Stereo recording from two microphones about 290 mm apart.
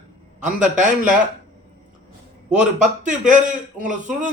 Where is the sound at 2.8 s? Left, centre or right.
Right.